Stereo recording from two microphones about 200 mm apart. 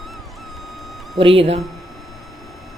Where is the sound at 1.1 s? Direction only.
30° right (ahead or behind).